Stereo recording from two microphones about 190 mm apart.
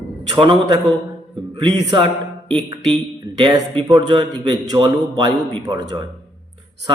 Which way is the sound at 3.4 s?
25° right (ahead or behind).